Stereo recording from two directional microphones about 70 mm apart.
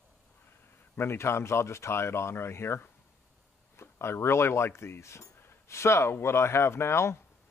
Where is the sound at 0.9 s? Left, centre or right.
Left.